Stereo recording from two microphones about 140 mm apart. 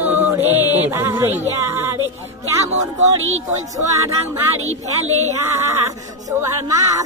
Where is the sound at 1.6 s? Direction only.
20° right (ahead or behind).